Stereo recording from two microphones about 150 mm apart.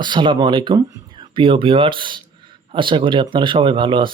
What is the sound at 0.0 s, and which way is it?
Speech, 30° right (ahead or behind).